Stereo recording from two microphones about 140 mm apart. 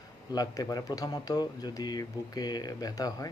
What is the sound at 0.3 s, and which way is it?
Speech, 25° left (ahead or behind).